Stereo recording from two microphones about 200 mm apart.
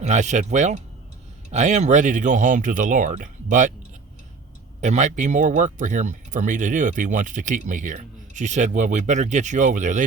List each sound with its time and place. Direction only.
0.0 s speech: 35° right (ahead or behind)
4.8 s speech: 35° right (ahead or behind)